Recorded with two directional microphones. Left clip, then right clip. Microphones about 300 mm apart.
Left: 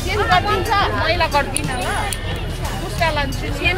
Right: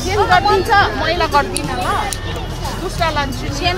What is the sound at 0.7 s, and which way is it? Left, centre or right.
Speech, right.